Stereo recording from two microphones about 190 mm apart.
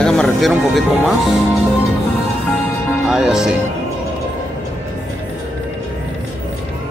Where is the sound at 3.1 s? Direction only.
Centre (ahead or behind).